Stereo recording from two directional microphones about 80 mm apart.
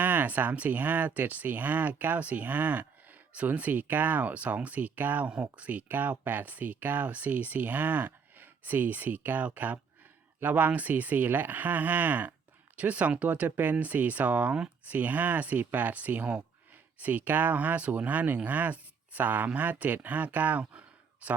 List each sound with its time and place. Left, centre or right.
0.0 s speech: right